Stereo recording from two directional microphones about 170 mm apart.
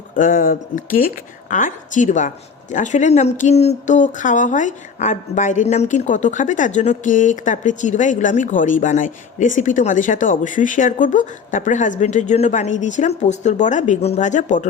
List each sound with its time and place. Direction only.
0.2 s a woman's voice: 55° left (ahead or behind)